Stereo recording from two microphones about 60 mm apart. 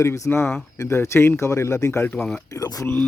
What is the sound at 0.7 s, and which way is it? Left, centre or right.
Speech, left.